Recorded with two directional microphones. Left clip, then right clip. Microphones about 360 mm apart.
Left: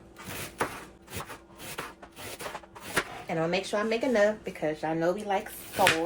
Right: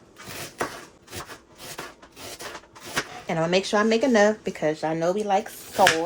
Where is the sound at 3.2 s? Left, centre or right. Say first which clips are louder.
Right 10 dB; right.